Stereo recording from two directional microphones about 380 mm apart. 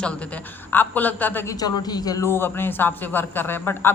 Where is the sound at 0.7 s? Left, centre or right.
Centre.